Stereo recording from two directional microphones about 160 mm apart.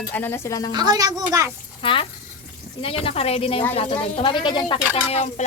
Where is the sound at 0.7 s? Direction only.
25° right (ahead or behind).